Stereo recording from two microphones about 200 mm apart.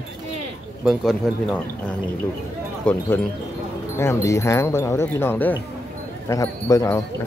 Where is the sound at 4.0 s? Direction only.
15° left (ahead or behind).